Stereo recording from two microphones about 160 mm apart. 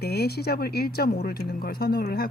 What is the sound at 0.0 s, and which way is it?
Speech, 85° left.